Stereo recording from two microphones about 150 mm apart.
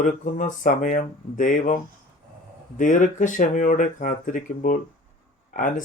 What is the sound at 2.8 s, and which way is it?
Speech, 60° left (ahead or behind).